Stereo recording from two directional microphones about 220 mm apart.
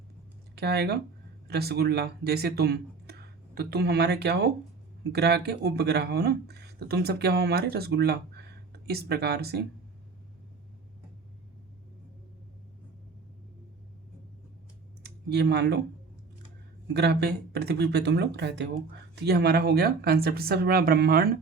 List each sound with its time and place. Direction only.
0.5 s speech: 50° right (ahead or behind)
15.0 s speech: 50° right (ahead or behind)
16.9 s speech: 50° right (ahead or behind)